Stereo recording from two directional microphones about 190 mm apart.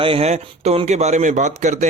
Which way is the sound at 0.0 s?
30° right (ahead or behind).